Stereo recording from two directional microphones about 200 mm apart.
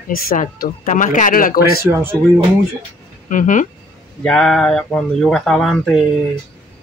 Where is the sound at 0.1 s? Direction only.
45° left (ahead or behind).